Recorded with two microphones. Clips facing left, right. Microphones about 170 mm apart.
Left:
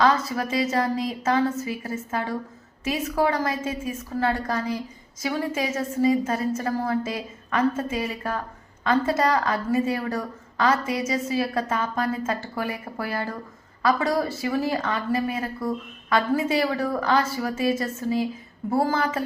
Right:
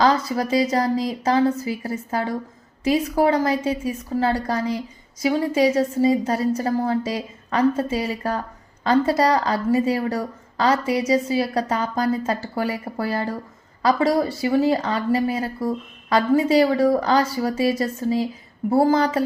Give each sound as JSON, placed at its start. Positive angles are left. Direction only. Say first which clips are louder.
{"t": 0.0, "sound": "a woman's voice", "louder": "right 3 dB", "side_deg": -35}